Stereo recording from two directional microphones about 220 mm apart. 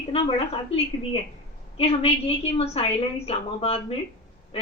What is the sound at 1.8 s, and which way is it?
A woman's voice, 25° left (ahead or behind).